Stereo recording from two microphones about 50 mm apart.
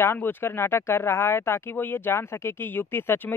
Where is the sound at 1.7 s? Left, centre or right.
Left.